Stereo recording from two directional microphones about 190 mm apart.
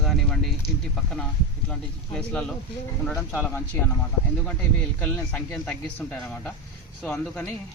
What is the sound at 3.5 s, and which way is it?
Speech, 5° left (ahead or behind).